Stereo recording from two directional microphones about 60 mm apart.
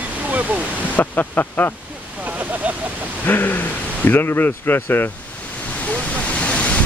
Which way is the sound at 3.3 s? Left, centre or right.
Left.